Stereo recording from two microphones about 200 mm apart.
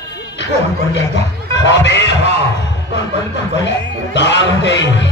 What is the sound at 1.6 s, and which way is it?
Speech, 65° left (ahead or behind).